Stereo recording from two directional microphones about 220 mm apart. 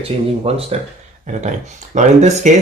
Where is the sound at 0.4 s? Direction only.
25° right (ahead or behind).